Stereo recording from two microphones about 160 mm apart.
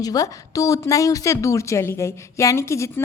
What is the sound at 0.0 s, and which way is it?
A woman's voice, 20° left (ahead or behind).